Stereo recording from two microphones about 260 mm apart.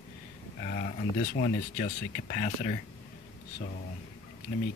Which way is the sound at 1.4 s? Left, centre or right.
Left.